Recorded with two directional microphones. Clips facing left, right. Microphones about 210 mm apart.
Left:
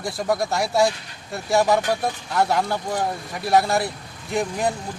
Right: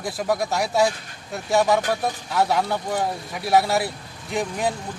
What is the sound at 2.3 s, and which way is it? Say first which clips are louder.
Speech: even; centre (ahead or behind).